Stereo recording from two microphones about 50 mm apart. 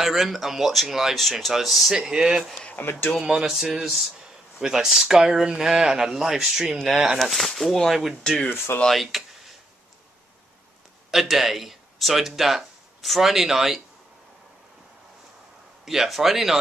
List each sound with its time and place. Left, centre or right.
0.0 s speech: centre
2.0 s speech: centre
2.7 s speech: left
3.2 s speech: centre
7.2 s speech: centre
8.2 s speech: centre
8.9 s speech: centre
11.1 s speech: centre
15.8 s speech: centre